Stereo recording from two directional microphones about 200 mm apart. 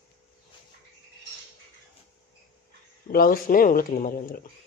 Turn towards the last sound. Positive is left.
turn(degrees=45)  # may be behind; listen again after turning